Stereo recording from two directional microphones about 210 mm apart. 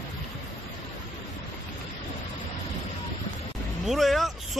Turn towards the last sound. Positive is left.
turn(degrees=0)  # may be behind; listen again after turning